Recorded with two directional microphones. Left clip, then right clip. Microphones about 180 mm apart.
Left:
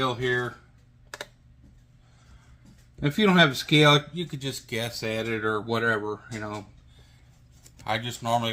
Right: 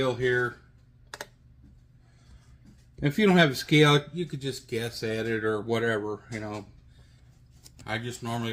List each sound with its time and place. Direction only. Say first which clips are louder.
0.0 s speech: even; 35° left (ahead or behind)
3.0 s speech: left 2 dB; 25° left (ahead or behind)
7.9 s speech: left 6 dB; 45° left (ahead or behind)